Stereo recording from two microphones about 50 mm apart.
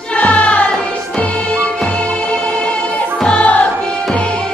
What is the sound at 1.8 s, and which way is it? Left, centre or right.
Music, left.